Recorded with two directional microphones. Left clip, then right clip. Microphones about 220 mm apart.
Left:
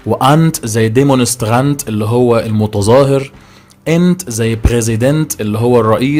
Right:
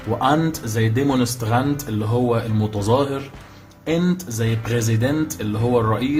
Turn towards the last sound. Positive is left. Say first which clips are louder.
# left 9 dB
turn(degrees=45)  # may be behind; listen again after turning